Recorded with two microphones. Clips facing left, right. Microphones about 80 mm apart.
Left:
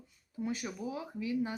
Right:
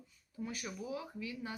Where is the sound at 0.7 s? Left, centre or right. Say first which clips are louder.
Left 3 dB; left.